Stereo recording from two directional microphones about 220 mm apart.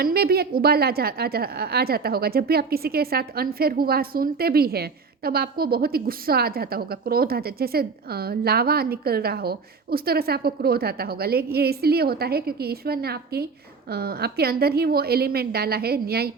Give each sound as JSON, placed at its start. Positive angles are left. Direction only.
{"t": 0.0, "sound": "a woman's voice", "side_deg": -45}